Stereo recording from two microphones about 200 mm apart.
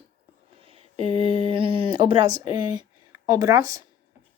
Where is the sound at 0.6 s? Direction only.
25° right (ahead or behind).